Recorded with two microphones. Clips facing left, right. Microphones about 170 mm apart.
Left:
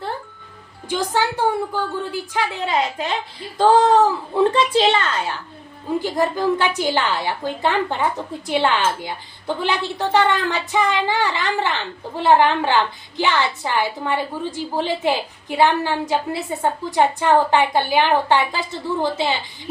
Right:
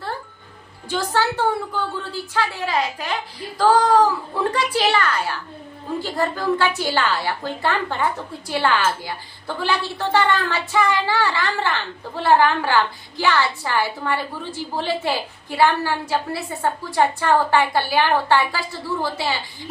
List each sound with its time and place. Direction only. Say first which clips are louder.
0.9 s a woman's voice: left 1 dB; 15° left (ahead or behind)